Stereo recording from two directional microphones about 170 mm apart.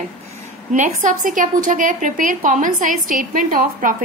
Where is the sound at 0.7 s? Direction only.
45° right (ahead or behind).